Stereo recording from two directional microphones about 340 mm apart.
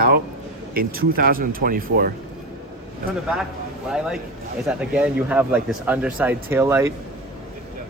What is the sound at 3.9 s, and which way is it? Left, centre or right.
Speech, centre.